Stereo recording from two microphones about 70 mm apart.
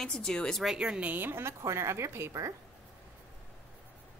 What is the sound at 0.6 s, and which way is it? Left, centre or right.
A woman's voice, centre.